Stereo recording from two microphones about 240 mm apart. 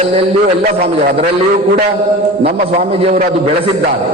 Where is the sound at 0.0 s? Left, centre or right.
Right.